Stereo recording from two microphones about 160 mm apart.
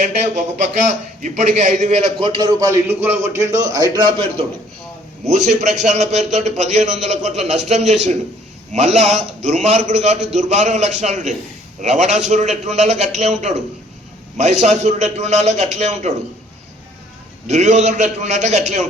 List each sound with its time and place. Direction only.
0.0 s a man's voice: 50° right (ahead or behind); by 4.0 s 25° right (ahead or behind)
5.2 s a man's voice: 45° right (ahead or behind)
17.5 s a man's voice: 45° right (ahead or behind)